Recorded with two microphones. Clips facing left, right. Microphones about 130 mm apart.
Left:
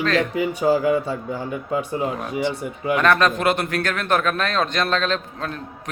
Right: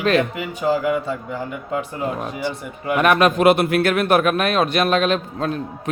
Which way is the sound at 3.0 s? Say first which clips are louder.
Right 3 dB; 10° right (ahead or behind).